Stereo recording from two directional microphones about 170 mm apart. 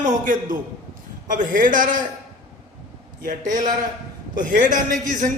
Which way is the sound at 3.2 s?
50° right (ahead or behind).